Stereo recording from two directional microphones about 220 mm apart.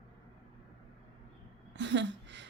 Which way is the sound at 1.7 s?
55° right (ahead or behind).